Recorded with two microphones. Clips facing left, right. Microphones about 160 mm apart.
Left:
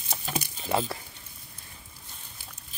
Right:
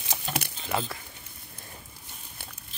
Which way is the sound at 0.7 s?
30° left (ahead or behind).